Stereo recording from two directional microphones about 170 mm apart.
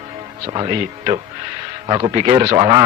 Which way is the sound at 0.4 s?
35° right (ahead or behind).